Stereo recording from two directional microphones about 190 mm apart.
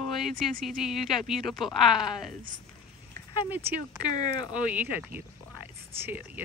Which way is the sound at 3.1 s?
20° left (ahead or behind).